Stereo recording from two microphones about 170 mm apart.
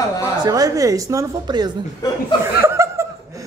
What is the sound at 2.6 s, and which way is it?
Chuckle, 15° right (ahead or behind).